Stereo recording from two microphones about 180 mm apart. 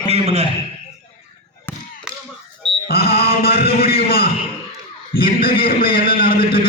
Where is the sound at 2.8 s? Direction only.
60° left (ahead or behind).